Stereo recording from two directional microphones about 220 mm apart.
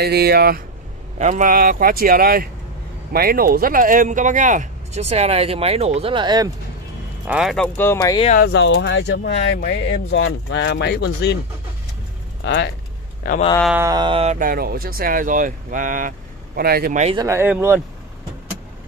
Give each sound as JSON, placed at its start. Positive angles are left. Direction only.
{"t": 0.0, "sound": "speech", "side_deg": -45}
{"t": 1.1, "sound": "speech", "side_deg": -35}
{"t": 7.2, "sound": "speech", "side_deg": 0}
{"t": 8.3, "sound": "speech", "side_deg": 45}
{"t": 12.4, "sound": "speech", "side_deg": 50}
{"t": 13.7, "sound": "speech", "side_deg": -15}
{"t": 17.0, "sound": "speech", "side_deg": -25}
{"t": 17.3, "sound": "speech", "side_deg": -10}